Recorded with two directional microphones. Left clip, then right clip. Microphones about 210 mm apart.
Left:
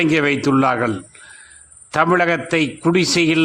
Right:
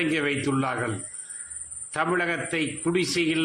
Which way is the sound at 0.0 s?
50° left (ahead or behind).